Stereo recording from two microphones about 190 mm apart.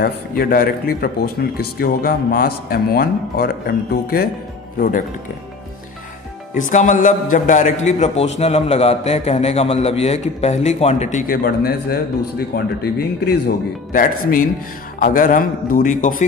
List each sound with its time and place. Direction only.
0.0 s speech: 50° left (ahead or behind)
6.5 s a man's voice: 40° left (ahead or behind)
11.4 s speech: 55° left (ahead or behind)
13.9 s speech: 45° left (ahead or behind)